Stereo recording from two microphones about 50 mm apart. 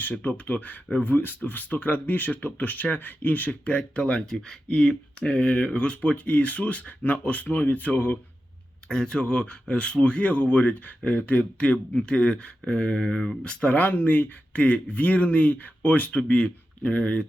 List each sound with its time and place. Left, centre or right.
0.0 s speech: left
8.9 s speech: centre